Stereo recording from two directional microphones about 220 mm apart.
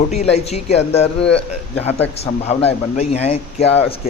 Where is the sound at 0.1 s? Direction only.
30° left (ahead or behind).